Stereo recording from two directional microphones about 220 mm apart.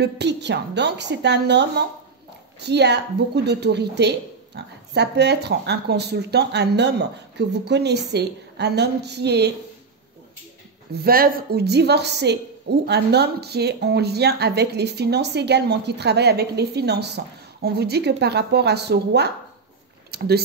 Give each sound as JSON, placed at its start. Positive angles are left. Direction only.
{"t": 0.0, "sound": "a woman's voice", "side_deg": -50}
{"t": 10.9, "sound": "a woman's voice", "side_deg": -45}